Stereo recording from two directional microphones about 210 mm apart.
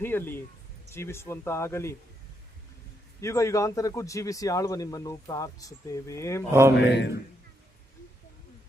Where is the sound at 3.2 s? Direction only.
15° left (ahead or behind).